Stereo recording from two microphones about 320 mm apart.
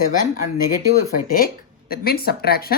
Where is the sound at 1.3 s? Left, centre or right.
Left.